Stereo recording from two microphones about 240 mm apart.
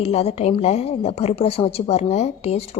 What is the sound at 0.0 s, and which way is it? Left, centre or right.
A woman's voice, left.